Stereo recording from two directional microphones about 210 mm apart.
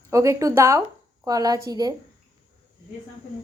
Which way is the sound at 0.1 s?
15° right (ahead or behind).